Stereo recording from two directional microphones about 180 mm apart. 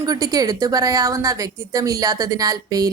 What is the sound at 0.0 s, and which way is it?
A woman's voice, 20° right (ahead or behind).